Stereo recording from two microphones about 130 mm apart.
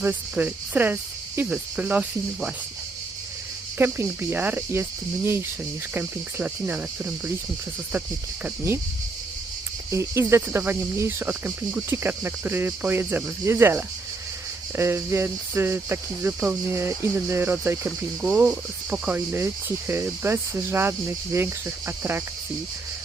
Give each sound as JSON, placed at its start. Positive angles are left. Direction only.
{"t": 0.0, "sound": "speech", "side_deg": -15}
{"t": 3.8, "sound": "speech", "side_deg": -15}
{"t": 9.9, "sound": "speech", "side_deg": -20}